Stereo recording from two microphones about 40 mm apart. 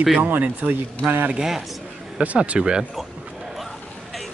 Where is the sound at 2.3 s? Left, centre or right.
Right.